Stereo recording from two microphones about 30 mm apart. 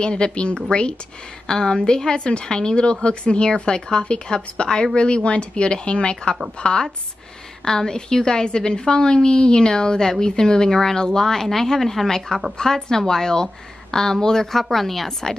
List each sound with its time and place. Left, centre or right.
0.0 s a woman's voice: left
1.5 s a woman's voice: left
3.7 s a woman's voice: left
4.1 s a woman's voice: left
7.6 s a woman's voice: left
14.5 s a woman's voice: centre